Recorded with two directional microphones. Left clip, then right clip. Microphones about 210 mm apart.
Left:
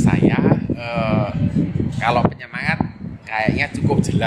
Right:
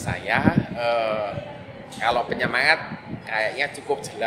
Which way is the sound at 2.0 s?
15° left (ahead or behind).